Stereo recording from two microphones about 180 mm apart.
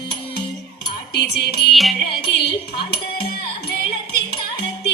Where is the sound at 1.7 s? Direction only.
Centre (ahead or behind).